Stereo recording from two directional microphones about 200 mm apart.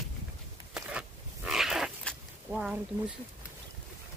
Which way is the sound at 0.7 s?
5° right (ahead or behind).